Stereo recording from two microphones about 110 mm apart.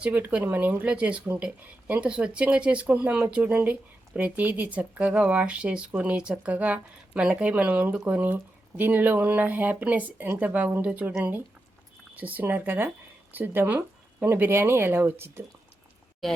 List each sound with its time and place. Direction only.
0.0 s speech: 15° right (ahead or behind)
16.2 s speech: centre (ahead or behind)